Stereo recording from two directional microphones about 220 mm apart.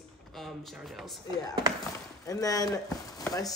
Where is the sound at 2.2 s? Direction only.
15° left (ahead or behind).